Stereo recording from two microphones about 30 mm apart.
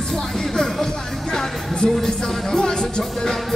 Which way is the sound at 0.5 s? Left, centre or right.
Centre.